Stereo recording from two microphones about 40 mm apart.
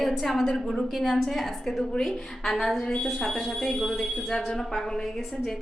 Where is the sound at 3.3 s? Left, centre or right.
Centre.